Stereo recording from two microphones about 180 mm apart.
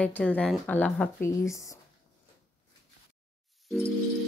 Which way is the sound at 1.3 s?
15° left (ahead or behind).